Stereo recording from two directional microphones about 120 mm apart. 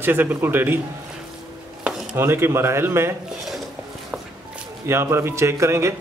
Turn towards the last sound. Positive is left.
turn(degrees=-25)  # may be behind; listen again after turning